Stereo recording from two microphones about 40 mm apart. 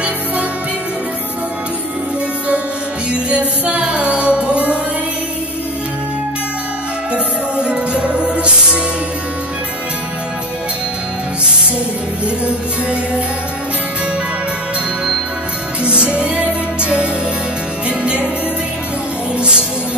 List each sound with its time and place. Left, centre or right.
3.1 s music: right
7.5 s music: right
15.8 s music: right